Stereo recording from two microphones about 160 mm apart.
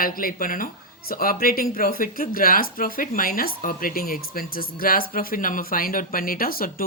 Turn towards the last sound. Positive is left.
turn(degrees=65)  # may be behind; listen again after turning